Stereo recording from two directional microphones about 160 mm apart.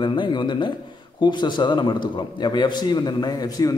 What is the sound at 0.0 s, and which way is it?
A man's voice, 30° left (ahead or behind).